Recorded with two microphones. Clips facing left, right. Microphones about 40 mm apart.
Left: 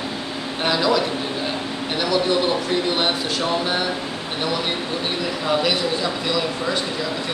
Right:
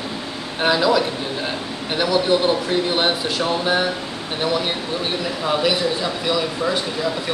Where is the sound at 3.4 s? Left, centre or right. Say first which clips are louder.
Right 4 dB; centre.